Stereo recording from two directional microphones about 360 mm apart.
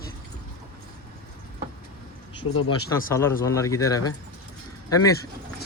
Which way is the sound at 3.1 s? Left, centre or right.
Centre.